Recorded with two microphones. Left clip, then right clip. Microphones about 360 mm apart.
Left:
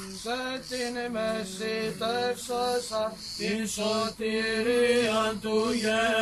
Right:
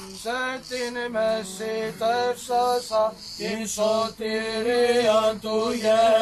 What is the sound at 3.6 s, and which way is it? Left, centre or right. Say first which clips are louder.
Mantra: right 8 dB; centre.